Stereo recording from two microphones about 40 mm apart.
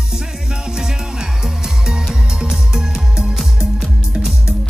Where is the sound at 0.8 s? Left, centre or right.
Centre.